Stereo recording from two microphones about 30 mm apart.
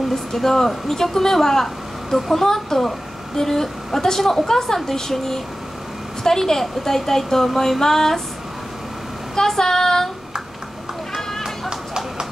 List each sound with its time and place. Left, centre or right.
0.1 s speech: centre
9.3 s speech: centre
11.7 s run: right